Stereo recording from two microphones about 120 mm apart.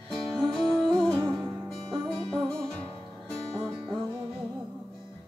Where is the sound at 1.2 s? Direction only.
30° right (ahead or behind).